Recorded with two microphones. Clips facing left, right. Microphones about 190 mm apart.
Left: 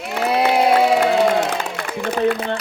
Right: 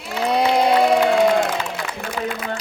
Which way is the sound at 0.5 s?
5° left (ahead or behind).